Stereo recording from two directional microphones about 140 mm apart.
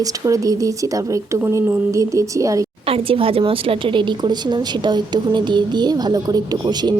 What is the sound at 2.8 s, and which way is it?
Speech, 40° right (ahead or behind).